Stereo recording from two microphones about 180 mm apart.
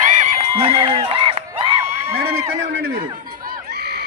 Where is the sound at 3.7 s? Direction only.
65° right (ahead or behind).